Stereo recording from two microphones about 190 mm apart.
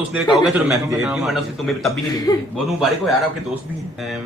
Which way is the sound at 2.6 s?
Centre (ahead or behind).